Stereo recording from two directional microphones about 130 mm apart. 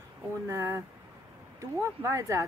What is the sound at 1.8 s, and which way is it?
Speech, 20° right (ahead or behind).